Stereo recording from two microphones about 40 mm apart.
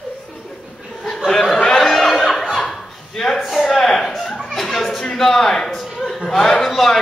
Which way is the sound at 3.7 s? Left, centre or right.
Centre.